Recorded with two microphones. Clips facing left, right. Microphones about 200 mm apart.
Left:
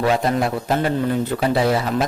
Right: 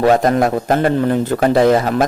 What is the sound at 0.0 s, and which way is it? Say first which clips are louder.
Speech: right 6 dB; 45° right (ahead or behind).